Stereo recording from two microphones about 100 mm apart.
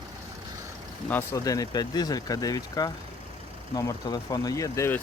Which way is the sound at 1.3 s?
35° left (ahead or behind).